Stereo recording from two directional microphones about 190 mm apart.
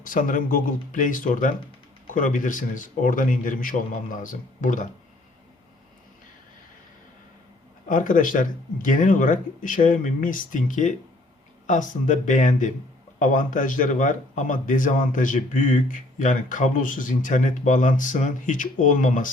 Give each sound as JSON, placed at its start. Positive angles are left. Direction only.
{"t": 0.0, "sound": "speech", "side_deg": 45}
{"t": 7.9, "sound": "speech", "side_deg": 45}